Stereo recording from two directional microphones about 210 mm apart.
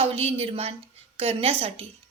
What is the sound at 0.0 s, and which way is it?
A woman's voice, 30° right (ahead or behind).